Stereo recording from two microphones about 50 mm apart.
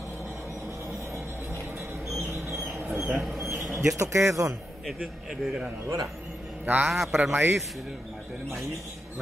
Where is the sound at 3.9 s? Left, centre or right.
Right.